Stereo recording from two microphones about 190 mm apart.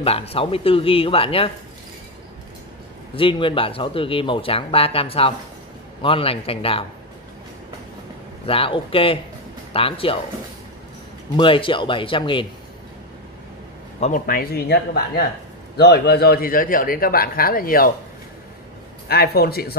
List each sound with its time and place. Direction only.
0.0 s speech: 30° left (ahead or behind)
3.2 s speech: 25° left (ahead or behind)
8.5 s speech: 30° left (ahead or behind)
11.3 s speech: 25° left (ahead or behind)
13.9 s speech: 40° left (ahead or behind)
19.0 s a man's voice: 55° left (ahead or behind)